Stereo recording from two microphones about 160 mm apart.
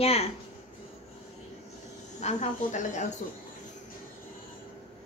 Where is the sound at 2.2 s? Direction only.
45° left (ahead or behind).